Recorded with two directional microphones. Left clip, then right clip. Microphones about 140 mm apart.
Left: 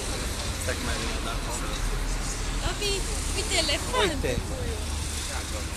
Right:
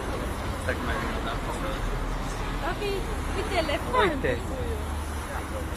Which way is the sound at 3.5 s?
30° left (ahead or behind).